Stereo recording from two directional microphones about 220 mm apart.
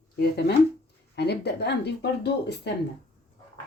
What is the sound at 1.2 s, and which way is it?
A woman's voice, 50° left (ahead or behind).